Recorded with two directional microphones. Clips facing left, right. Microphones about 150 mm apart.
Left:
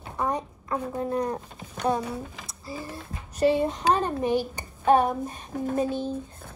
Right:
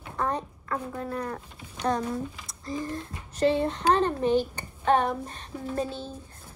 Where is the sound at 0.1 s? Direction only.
15° left (ahead or behind).